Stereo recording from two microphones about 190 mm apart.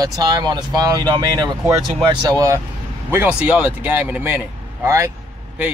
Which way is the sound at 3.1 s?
10° right (ahead or behind).